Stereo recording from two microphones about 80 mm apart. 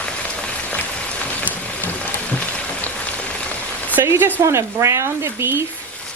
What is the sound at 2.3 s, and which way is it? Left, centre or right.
Rain on surface, centre.